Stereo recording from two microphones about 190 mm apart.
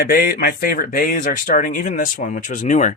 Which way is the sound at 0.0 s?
55° left (ahead or behind).